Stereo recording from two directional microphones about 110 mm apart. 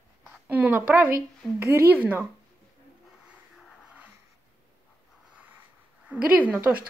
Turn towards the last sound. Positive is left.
turn(degrees=-10)  # may be behind; listen again after turning